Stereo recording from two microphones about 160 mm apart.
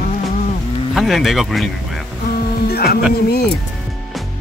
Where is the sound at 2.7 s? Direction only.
75° left (ahead or behind).